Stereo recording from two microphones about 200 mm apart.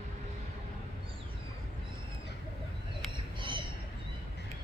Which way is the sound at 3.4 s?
25° right (ahead or behind).